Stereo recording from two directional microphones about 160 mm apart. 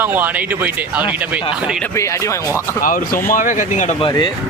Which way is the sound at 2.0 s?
20° left (ahead or behind).